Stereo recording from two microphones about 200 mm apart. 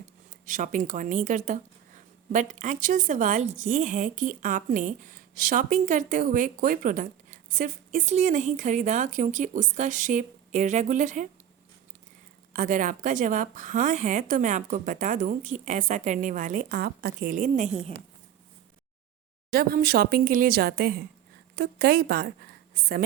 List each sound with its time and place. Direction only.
0.4 s a woman's voice: 40° right (ahead or behind)
12.5 s a woman's voice: 40° right (ahead or behind)
19.5 s speech: 50° right (ahead or behind)